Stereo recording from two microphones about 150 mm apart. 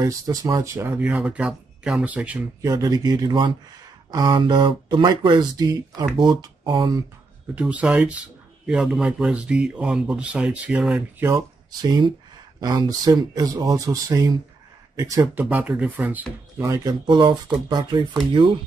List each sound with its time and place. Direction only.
0.0 s speech: 25° right (ahead or behind)
2.6 s speech: 25° right (ahead or behind)
7.5 s speech: 10° right (ahead or behind)
15.4 s speech: 5° right (ahead or behind); by 18.0 s 30° right (ahead or behind)